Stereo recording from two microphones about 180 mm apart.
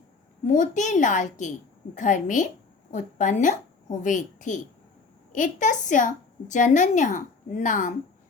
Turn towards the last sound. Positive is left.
turn(degrees=45)  # may be behind; listen again after turning